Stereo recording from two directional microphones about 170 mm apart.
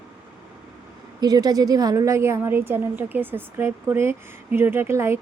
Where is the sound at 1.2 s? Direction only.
20° right (ahead or behind).